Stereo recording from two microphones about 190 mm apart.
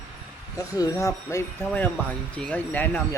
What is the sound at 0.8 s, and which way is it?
Speech, 15° left (ahead or behind).